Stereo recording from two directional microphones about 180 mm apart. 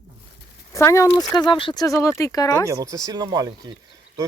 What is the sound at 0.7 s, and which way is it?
Speech, 15° left (ahead or behind).